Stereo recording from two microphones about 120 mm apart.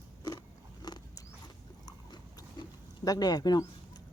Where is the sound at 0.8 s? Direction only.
35° left (ahead or behind).